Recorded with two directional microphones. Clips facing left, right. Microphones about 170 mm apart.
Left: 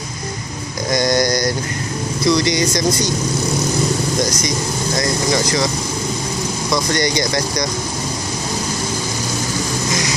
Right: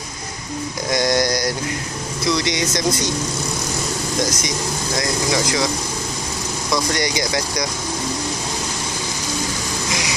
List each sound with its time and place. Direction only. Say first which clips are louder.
0.9 s speech: left 2 dB; centre (ahead or behind)
4.9 s speech: left 2 dB; 5° right (ahead or behind)
6.9 s speech: left 3 dB; 5° right (ahead or behind)